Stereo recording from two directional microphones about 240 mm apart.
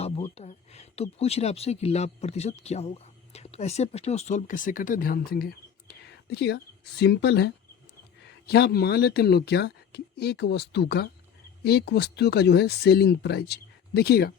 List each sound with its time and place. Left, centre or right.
0.3 s speech: left